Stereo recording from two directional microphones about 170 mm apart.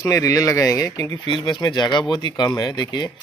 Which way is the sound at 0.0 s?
20° left (ahead or behind).